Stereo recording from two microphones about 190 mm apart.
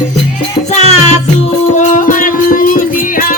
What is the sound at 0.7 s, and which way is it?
Music, 35° left (ahead or behind).